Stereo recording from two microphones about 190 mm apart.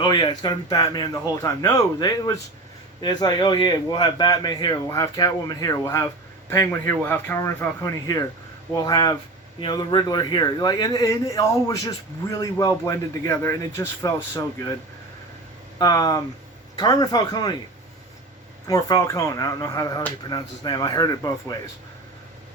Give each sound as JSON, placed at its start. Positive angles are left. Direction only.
{"t": 0.0, "sound": "a man's voice", "side_deg": 20}
{"t": 15.8, "sound": "a man's voice", "side_deg": 20}
{"t": 18.7, "sound": "a man's voice", "side_deg": 20}